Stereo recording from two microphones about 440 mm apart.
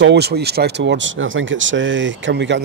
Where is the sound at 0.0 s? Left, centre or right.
Right.